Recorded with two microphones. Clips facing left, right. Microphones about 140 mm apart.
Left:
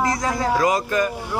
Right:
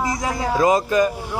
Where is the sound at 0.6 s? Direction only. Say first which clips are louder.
Right 7 dB; 20° right (ahead or behind).